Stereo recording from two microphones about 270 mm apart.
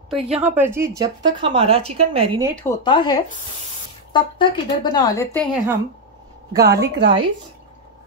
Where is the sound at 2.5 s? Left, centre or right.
Centre.